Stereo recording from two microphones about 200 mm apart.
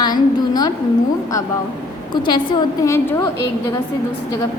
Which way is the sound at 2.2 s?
25° left (ahead or behind).